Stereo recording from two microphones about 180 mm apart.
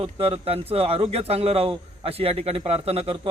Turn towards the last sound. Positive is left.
turn(degrees=-35)  # may be behind; listen again after turning